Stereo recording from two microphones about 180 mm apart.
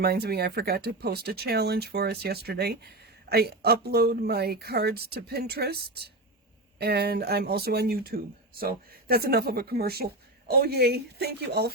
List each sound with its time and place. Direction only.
0.0 s speech: 60° right (ahead or behind)